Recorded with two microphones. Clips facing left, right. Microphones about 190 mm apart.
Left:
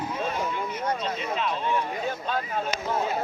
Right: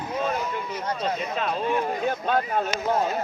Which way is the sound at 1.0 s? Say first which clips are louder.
Right 2 dB; 45° right (ahead or behind).